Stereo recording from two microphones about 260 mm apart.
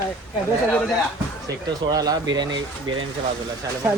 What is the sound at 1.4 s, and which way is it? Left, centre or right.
Speech, centre.